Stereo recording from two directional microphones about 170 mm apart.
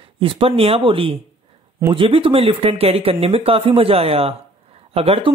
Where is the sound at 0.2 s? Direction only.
30° right (ahead or behind).